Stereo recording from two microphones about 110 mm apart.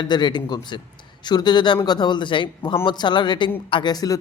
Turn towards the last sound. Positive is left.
turn(degrees=50)  # may be behind; listen again after turning